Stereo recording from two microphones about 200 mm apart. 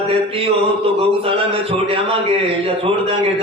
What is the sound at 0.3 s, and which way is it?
A man's voice, 30° right (ahead or behind).